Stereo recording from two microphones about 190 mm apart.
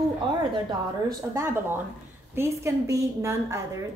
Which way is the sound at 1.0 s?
15° right (ahead or behind).